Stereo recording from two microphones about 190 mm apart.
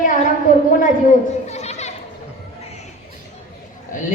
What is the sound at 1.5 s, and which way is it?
Children playing, 35° left (ahead or behind).